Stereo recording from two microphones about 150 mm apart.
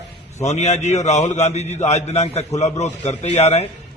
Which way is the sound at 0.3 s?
50° left (ahead or behind).